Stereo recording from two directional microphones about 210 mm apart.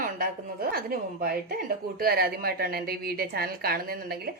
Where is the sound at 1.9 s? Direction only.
45° right (ahead or behind).